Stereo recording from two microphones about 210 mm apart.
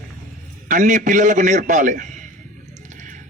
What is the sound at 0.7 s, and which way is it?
A man's voice, 35° right (ahead or behind).